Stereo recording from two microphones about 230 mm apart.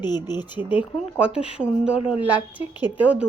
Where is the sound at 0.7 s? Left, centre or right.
Centre.